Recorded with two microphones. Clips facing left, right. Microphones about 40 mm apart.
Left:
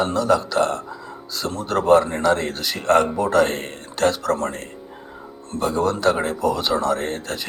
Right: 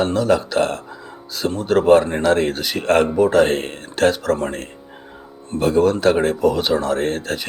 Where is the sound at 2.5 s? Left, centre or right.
Centre.